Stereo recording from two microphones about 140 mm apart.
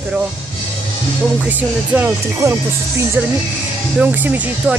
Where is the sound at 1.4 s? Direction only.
10° right (ahead or behind).